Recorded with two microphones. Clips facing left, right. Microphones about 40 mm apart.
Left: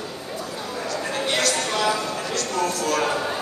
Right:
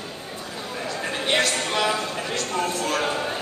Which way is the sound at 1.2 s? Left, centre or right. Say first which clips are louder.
Right 2 dB; right.